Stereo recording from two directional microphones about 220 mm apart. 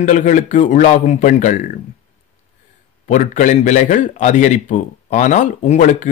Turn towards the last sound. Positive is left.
turn(degrees=35)  # may be behind; listen again after turning